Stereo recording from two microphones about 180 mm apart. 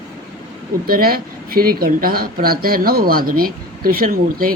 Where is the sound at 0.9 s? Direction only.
55° right (ahead or behind).